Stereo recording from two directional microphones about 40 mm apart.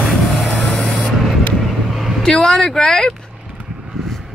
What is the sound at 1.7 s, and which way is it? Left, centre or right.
Vehicle, centre.